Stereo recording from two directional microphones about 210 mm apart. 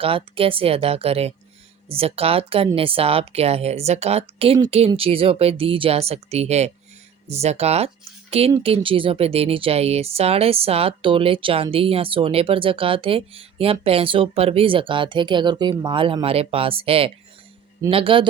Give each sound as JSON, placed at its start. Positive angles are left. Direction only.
{"t": 0.0, "sound": "speech", "side_deg": -25}